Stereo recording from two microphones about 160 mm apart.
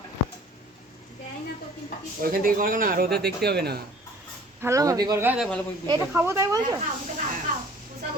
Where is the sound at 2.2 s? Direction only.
60° right (ahead or behind); by 3.8 s 90° right.